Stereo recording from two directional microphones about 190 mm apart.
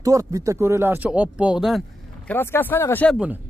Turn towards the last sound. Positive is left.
turn(degrees=10)  # may be behind; listen again after turning